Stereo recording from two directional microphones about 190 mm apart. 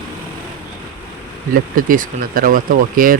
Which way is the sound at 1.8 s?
45° right (ahead or behind).